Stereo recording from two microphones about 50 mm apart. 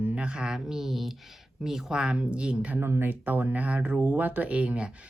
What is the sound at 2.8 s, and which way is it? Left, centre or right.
Speech, right.